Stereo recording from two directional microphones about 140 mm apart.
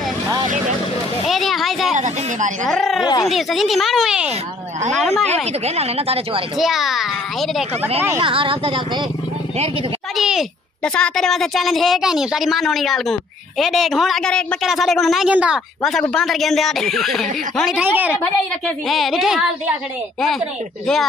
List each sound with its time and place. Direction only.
1.2 s a woman's voice: centre (ahead or behind)
2.0 s a woman's voice: 60° right (ahead or behind)
2.6 s a woman's voice: centre (ahead or behind)
5.3 s speech: 45° right (ahead or behind)
6.6 s a woman's voice: centre (ahead or behind)
8.2 s speech: 40° right (ahead or behind)
10.1 s a sound: 5° right (ahead or behind)
10.8 s a woman's voice: 5° left (ahead or behind)
17.8 s a woman's voice: 10° right (ahead or behind)
18.9 s a woman's voice: centre (ahead or behind)